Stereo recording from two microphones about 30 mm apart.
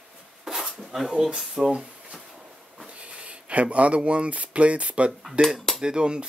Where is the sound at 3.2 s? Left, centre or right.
Right.